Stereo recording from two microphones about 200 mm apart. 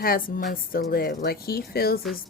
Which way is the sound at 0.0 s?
45° left (ahead or behind).